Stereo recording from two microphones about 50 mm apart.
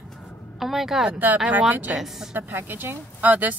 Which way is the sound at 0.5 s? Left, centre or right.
Centre.